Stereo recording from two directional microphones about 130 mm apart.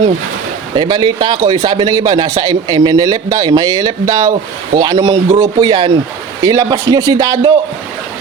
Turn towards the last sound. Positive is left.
turn(degrees=-30)  # may be behind; listen again after turning